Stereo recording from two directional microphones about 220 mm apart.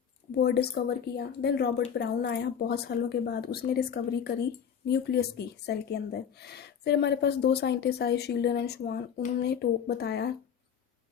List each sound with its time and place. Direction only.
0.3 s speech: 50° left (ahead or behind)